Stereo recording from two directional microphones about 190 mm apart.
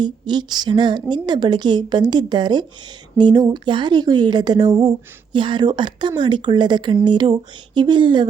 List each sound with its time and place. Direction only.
0.0 s speech: 20° right (ahead or behind)